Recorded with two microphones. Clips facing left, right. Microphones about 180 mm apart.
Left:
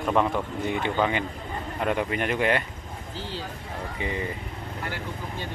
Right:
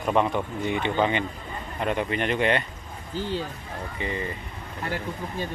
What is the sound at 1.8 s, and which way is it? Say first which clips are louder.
Speech: even; 10° left (ahead or behind).